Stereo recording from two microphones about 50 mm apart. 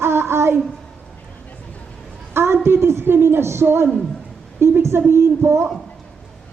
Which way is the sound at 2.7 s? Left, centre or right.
Right.